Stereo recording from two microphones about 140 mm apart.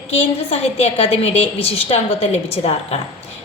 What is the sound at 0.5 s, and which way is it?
A woman's voice, 45° left (ahead or behind).